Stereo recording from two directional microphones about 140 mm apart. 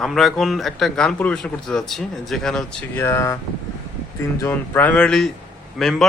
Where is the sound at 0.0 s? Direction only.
Centre (ahead or behind).